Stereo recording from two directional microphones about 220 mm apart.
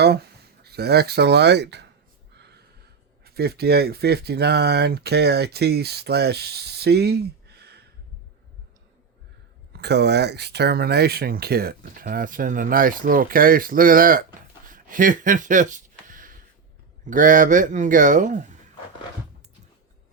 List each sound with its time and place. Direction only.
0.0 s speech: 45° right (ahead or behind)
3.2 s speech: 45° right (ahead or behind)
9.7 s speech: 50° right (ahead or behind)
14.7 s a sound: 40° right (ahead or behind)
17.1 s speech: 35° right (ahead or behind)